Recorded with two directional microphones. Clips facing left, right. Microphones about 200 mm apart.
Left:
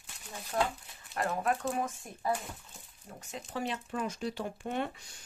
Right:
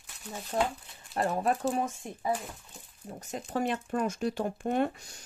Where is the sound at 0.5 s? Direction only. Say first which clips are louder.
Right 2 dB; 25° right (ahead or behind).